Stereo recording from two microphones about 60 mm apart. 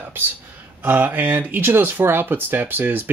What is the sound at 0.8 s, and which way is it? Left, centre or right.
Speech, right.